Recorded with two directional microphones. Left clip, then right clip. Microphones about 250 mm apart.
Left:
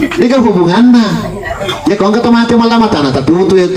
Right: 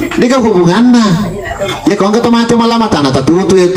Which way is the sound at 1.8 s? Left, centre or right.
Right.